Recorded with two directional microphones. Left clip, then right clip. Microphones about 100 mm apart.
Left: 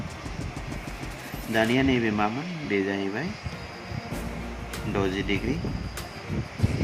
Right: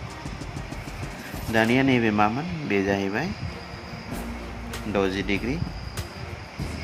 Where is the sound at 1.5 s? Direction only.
40° right (ahead or behind); by 3.2 s 60° right (ahead or behind).